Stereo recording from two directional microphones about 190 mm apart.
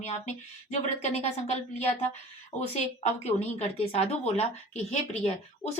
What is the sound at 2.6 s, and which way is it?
A woman's voice, 35° left (ahead or behind).